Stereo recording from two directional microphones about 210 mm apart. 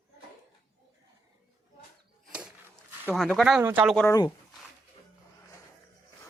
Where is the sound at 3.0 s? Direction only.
Centre (ahead or behind).